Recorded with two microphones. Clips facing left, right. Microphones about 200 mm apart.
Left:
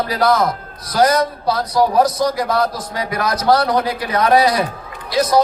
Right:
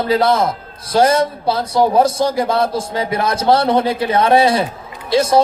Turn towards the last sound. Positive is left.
turn(degrees=-25)  # may be behind; listen again after turning